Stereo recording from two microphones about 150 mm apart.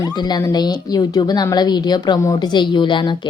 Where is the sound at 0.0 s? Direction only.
25° left (ahead or behind).